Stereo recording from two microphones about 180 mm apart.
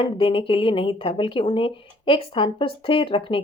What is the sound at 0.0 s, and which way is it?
A woman's voice, 30° left (ahead or behind).